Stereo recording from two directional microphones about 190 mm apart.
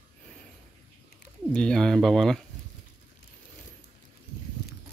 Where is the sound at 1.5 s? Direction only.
5° left (ahead or behind).